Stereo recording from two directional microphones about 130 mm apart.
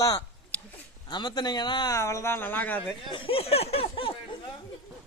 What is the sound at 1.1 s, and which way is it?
Speech, 35° left (ahead or behind).